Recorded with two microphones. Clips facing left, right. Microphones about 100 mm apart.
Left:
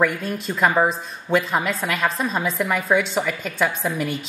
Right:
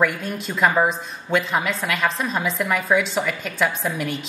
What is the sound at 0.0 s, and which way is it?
A woman's voice, centre (ahead or behind).